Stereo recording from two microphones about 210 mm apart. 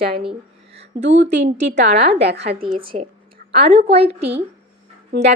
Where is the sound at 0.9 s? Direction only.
55° right (ahead or behind).